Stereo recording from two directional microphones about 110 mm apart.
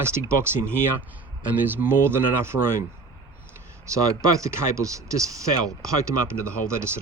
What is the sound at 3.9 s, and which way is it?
Speech, 30° right (ahead or behind).